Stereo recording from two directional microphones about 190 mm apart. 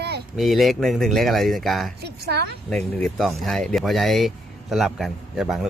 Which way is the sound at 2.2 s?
60° right (ahead or behind).